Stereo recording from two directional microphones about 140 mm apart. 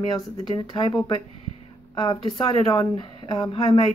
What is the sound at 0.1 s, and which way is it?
Speech, 30° left (ahead or behind).